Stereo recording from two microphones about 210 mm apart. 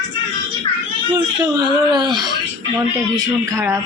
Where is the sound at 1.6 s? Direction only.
20° right (ahead or behind).